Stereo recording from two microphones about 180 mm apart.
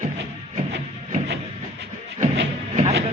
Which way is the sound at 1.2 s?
70° right (ahead or behind).